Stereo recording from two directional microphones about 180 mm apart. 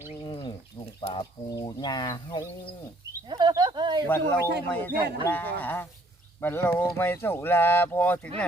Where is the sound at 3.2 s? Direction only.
25° right (ahead or behind).